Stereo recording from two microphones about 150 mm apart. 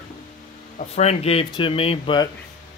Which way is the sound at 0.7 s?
45° left (ahead or behind).